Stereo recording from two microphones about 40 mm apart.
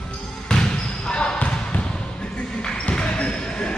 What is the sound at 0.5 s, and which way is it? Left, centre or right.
Basketball bounce, left.